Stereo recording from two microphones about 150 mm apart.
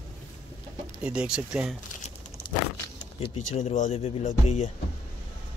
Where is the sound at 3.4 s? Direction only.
55° left (ahead or behind).